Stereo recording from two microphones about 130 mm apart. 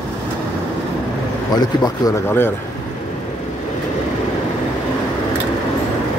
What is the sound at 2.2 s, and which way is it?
Speech, 15° left (ahead or behind).